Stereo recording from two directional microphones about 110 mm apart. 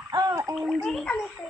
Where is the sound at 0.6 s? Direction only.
5° left (ahead or behind).